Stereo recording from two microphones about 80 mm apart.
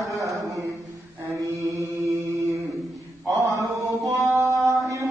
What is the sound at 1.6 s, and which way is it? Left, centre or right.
Chant, right.